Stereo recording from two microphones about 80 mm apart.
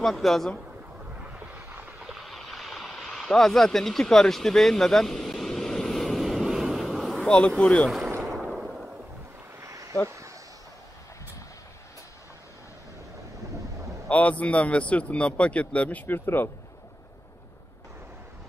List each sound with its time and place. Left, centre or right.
0.0 s speech: centre
1.2 s a sound: right
2.0 s vehicle: centre
7.2 s a man's voice: centre
8.5 s fireworks: centre
9.6 s a sound: right
14.0 s a man's voice: centre
16.1 s speech: left